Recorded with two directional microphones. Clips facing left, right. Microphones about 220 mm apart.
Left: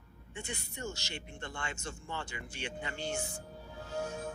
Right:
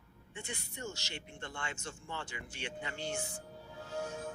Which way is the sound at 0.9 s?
45° left (ahead or behind).